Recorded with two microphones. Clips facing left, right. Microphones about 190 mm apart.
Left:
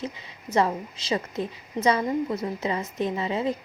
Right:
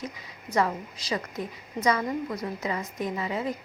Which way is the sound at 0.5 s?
25° left (ahead or behind).